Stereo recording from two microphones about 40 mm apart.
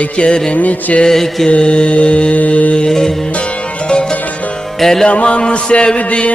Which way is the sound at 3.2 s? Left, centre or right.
Left.